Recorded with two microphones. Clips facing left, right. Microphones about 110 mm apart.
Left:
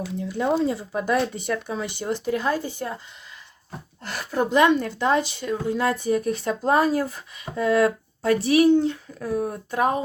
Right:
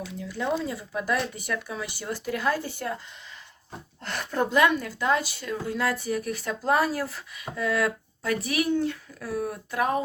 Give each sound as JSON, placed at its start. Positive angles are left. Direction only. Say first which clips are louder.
{"t": 0.3, "sound": "speech", "louder": "left 6 dB", "side_deg": 25}
{"t": 4.0, "sound": "speech", "louder": "left 2 dB", "side_deg": 5}
{"t": 4.5, "sound": "speech", "louder": "left 5 dB", "side_deg": 25}